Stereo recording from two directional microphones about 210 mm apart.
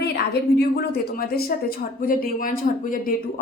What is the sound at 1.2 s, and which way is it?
A woman's voice, 45° left (ahead or behind).